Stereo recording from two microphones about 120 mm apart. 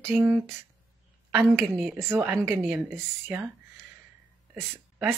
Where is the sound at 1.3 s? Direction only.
20° right (ahead or behind).